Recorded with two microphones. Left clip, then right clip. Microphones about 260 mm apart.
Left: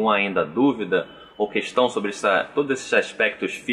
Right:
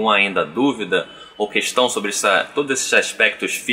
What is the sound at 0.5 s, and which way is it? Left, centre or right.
Speech, left.